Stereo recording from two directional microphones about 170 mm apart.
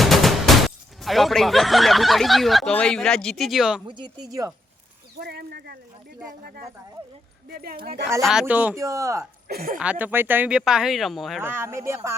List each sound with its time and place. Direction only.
0.0 s machine gun: centre (ahead or behind)
1.0 s speech: centre (ahead or behind)
3.8 s speech: 25° right (ahead or behind)
5.2 s speech: 70° right (ahead or behind)
7.5 s speech: 65° right (ahead or behind)
8.2 s speech: 5° right (ahead or behind)
9.5 s speech: 60° right (ahead or behind)
9.7 s speech: 5° right (ahead or behind)
11.3 s speech: 10° right (ahead or behind)